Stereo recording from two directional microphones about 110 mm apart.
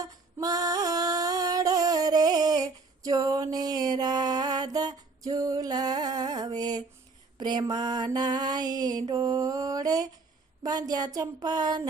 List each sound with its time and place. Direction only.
0.0 s a sound: 35° right (ahead or behind)
7.3 s mantra: 40° right (ahead or behind)
10.6 s speech: 35° right (ahead or behind)